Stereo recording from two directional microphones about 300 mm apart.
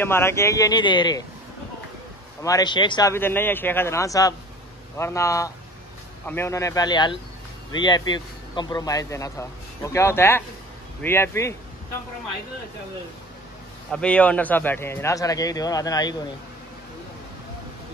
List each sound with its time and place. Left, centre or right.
0.0 s a man's voice: centre
2.4 s a man's voice: centre
13.9 s a man's voice: centre